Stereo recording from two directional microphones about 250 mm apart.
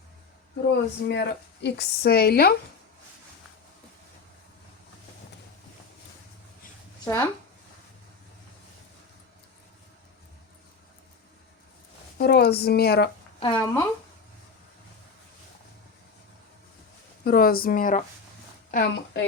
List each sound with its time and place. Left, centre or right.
0.7 s a woman's voice: left
7.0 s speech: centre
12.1 s a woman's voice: left
13.4 s speech: centre
17.2 s a woman's voice: left